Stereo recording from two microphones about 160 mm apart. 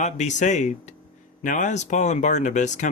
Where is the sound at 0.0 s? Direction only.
50° left (ahead or behind).